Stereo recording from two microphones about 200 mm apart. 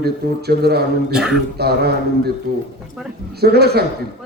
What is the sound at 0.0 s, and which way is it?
Speech, 55° right (ahead or behind).